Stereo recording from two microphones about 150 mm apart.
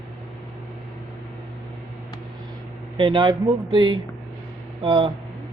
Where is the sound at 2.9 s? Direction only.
35° right (ahead or behind).